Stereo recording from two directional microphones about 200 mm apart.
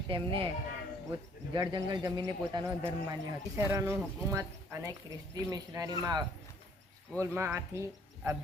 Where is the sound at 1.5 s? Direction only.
20° right (ahead or behind).